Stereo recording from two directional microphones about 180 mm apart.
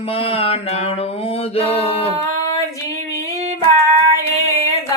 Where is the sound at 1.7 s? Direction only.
30° left (ahead or behind).